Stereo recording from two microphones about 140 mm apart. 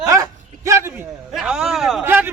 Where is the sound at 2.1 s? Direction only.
15° right (ahead or behind).